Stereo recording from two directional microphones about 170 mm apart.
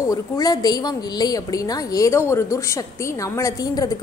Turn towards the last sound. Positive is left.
turn(degrees=20)  # may be behind; listen again after turning